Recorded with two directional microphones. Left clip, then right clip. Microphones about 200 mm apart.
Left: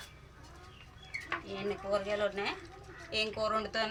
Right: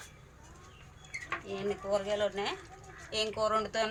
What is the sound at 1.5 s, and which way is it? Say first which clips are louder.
Speech: right 2 dB; 5° right (ahead or behind).